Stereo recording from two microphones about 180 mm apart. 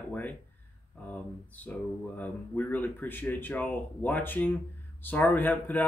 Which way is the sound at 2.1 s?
10° left (ahead or behind).